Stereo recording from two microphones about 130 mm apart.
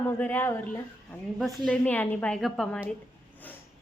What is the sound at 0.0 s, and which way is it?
Speech, 15° left (ahead or behind).